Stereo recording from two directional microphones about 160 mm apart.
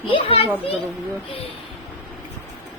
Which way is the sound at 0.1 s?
35° left (ahead or behind).